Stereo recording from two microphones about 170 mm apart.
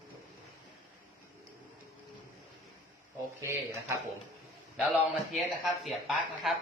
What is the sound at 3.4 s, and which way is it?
Speech, 15° right (ahead or behind).